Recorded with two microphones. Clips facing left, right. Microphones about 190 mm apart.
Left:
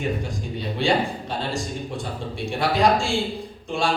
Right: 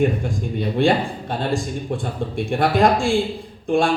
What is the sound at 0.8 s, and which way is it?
Speech, 50° right (ahead or behind).